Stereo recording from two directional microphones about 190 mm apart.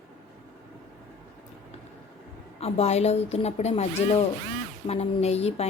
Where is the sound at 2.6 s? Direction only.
30° left (ahead or behind).